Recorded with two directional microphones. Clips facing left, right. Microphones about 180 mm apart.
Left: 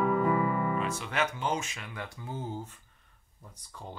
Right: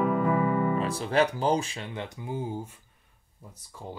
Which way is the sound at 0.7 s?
35° right (ahead or behind).